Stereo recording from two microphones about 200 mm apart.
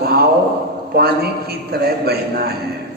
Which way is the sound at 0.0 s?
50° right (ahead or behind).